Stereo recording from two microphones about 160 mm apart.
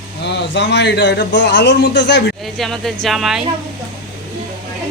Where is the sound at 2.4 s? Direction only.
Centre (ahead or behind).